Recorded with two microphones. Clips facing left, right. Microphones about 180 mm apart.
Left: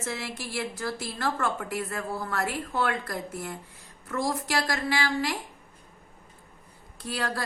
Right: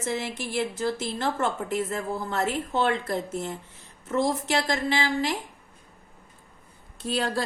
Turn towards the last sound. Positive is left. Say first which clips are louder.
# right 4 dB
turn(degrees=-25)  # may be behind; listen again after turning